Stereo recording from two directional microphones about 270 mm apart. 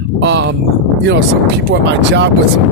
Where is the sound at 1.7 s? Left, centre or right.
Right.